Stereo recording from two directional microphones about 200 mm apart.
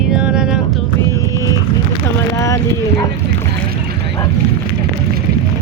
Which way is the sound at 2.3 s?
15° left (ahead or behind).